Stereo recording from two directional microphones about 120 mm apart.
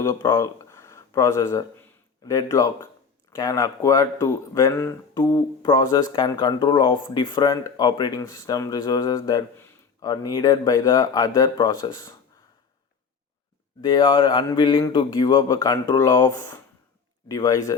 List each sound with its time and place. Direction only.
0.0 s speech: 30° left (ahead or behind)
5.3 s mantra: 35° left (ahead or behind)
13.8 s mantra: 40° left (ahead or behind)
17.2 s speech: 30° left (ahead or behind)